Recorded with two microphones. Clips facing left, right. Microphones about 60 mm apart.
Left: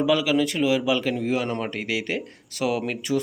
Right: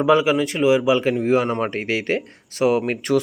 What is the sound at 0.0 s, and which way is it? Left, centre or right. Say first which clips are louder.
Speech: right 4 dB; right.